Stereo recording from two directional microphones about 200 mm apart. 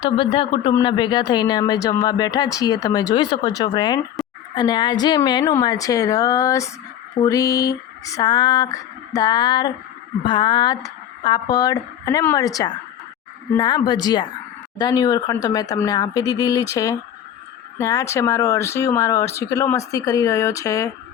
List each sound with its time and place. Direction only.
0.0 s speech: 25° left (ahead or behind)